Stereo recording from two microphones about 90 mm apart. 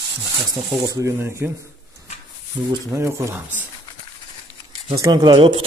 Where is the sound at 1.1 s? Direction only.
30° right (ahead or behind).